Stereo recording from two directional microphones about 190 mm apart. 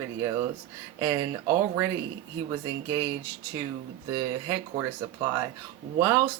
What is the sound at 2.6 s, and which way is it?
Speech, 20° right (ahead or behind).